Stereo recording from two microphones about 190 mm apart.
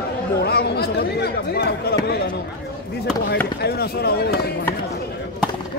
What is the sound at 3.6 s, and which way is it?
Speech, 55° left (ahead or behind).